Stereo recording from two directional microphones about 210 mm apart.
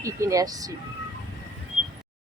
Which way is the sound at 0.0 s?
15° right (ahead or behind).